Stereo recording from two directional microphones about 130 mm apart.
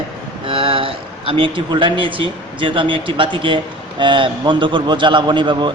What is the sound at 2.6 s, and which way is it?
A man's voice, 40° right (ahead or behind).